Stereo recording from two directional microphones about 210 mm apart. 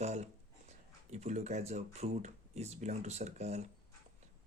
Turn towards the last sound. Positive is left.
turn(degrees=-30)  # may be behind; listen again after turning